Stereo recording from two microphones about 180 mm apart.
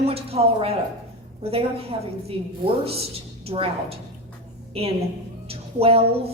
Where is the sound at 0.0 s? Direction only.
35° right (ahead or behind).